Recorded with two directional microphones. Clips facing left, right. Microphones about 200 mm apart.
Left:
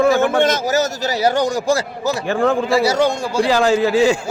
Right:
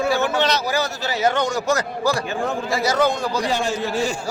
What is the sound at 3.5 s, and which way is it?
Speech, 90° left.